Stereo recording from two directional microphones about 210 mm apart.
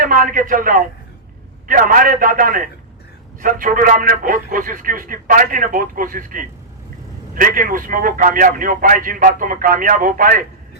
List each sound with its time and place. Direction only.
0.0 s a man's voice: 40° right (ahead or behind)